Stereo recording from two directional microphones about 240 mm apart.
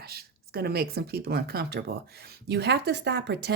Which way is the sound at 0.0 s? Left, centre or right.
Right.